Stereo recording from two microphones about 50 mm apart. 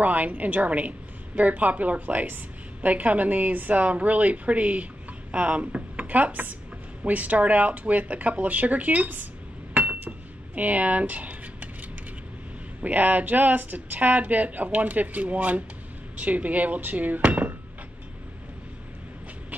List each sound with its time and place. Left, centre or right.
0.0 s a woman's voice: right
9.9 s cutlery: right
12.8 s a woman's voice: right